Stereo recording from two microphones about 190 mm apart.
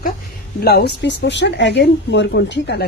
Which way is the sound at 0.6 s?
55° left (ahead or behind).